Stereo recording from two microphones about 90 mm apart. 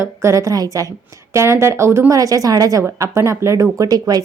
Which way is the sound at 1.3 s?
30° right (ahead or behind).